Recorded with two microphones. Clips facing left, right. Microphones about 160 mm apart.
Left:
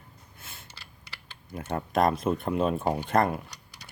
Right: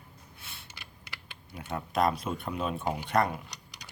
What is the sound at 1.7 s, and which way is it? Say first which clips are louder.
Speech: left 3 dB; 50° left (ahead or behind).